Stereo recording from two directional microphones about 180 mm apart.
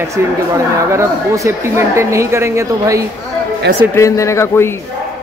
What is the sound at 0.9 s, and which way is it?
Speech, 15° right (ahead or behind).